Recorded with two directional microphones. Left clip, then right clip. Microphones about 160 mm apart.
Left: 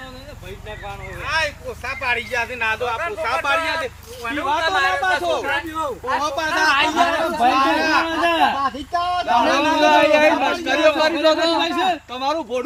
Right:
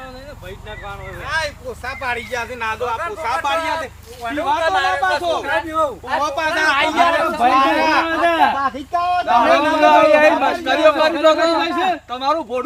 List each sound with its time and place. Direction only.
1.2 s a man's voice: 90° right; by 4.9 s 70° right (ahead or behind)
4.9 s a man's voice: 40° right (ahead or behind)
6.1 s speech: 25° right (ahead or behind)
8.1 s speech: 20° left (ahead or behind)
9.3 s a man's voice: 10° left (ahead or behind)